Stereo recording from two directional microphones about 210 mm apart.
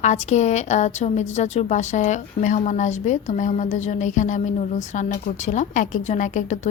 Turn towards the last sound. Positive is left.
turn(degrees=35)  # may be behind; listen again after turning